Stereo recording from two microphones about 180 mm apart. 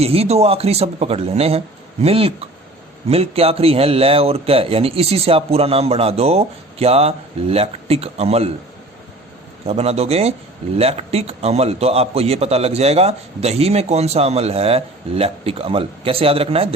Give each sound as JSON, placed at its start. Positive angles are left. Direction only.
{"t": 0.0, "sound": "a man's voice", "side_deg": -35}
{"t": 9.6, "sound": "a man's voice", "side_deg": -35}